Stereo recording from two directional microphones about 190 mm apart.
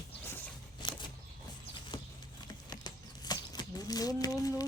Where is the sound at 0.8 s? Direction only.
25° left (ahead or behind).